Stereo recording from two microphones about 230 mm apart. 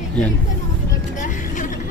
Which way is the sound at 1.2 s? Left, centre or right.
Left.